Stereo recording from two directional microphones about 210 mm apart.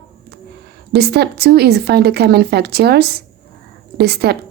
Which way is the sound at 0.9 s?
50° right (ahead or behind).